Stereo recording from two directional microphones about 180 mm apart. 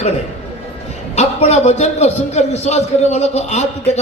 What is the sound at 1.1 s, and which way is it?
A man's voice, 40° left (ahead or behind).